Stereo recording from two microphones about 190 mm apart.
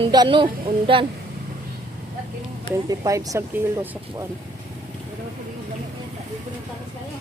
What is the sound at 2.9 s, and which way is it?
Speech, 15° right (ahead or behind).